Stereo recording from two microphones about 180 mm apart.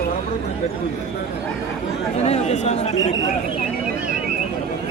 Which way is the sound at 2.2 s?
35° left (ahead or behind).